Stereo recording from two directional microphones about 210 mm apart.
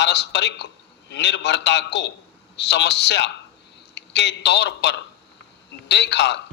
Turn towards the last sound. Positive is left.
turn(degrees=55)  # may be behind; listen again after turning